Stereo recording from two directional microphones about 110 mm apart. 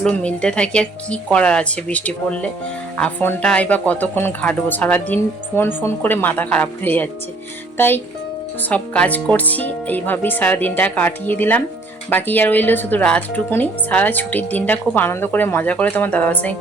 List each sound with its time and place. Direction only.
0.0 s speech: 10° left (ahead or behind)